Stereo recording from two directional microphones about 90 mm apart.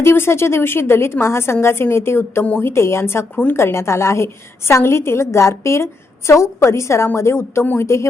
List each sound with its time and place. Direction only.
0.0 s a woman's voice: 30° left (ahead or behind)